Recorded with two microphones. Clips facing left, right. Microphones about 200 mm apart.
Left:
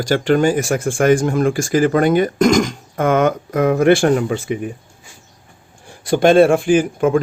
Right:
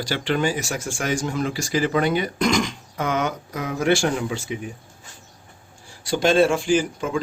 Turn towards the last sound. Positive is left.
turn(degrees=55)  # may be behind; listen again after turning